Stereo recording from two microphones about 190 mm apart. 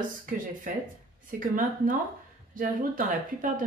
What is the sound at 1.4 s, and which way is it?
Speech, 45° right (ahead or behind).